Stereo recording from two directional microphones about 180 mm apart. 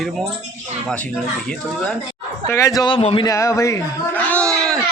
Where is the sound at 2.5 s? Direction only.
15° left (ahead or behind).